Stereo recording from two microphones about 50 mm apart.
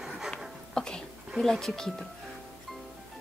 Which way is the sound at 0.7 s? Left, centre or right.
Centre.